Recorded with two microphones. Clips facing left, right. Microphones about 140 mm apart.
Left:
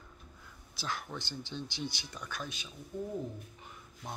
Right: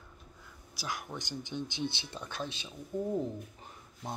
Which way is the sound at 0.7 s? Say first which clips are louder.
Even; 10° right (ahead or behind).